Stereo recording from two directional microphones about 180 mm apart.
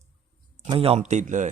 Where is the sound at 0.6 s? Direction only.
30° right (ahead or behind).